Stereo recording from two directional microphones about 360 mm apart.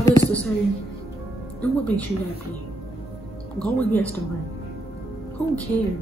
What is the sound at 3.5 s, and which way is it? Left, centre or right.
Speech, centre.